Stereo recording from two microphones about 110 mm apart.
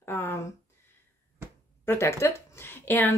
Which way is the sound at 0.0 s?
20° left (ahead or behind).